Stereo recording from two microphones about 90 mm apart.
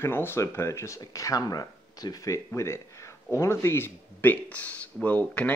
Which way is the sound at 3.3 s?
30° left (ahead or behind).